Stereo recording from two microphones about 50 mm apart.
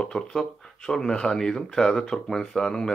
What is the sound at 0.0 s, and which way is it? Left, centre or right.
Speech, centre.